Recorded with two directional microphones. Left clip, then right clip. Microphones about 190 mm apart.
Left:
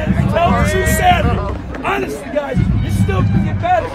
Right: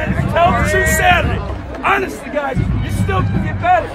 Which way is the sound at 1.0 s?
10° right (ahead or behind).